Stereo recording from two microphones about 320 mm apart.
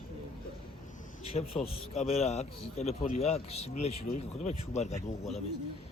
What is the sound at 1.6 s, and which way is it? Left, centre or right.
A man's voice, centre.